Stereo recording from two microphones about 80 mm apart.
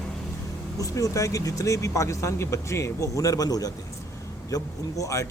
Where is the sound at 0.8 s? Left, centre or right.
Left.